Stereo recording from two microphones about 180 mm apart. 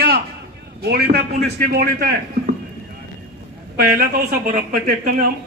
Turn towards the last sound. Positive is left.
turn(degrees=-50)  # may be behind; listen again after turning